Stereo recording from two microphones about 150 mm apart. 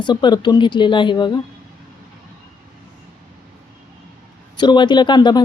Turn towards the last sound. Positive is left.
turn(degrees=30)  # may be behind; listen again after turning